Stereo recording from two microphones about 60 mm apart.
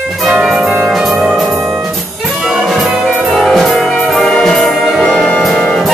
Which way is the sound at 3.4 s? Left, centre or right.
Centre.